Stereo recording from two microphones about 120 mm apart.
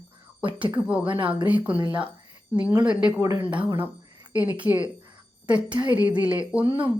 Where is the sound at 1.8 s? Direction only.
45° right (ahead or behind).